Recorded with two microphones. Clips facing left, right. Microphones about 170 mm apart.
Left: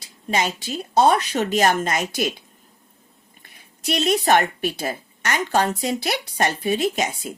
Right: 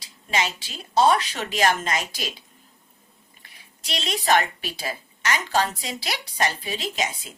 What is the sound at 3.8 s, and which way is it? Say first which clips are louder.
A woman's voice: left 6 dB; 50° left (ahead or behind).